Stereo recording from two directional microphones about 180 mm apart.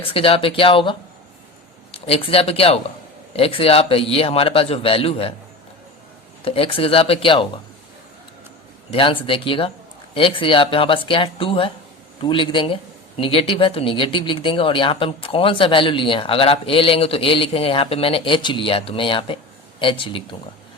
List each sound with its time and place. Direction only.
0.0 s a man's voice: 30° left (ahead or behind)
6.4 s a man's voice: 30° left (ahead or behind)
8.9 s speech: 30° left (ahead or behind)